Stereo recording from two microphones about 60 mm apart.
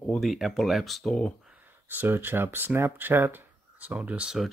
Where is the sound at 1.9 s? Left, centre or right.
Right.